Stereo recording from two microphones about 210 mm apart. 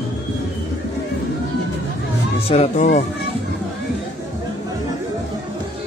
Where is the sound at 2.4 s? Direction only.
30° left (ahead or behind).